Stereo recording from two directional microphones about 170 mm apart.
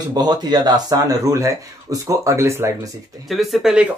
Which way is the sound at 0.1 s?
25° right (ahead or behind).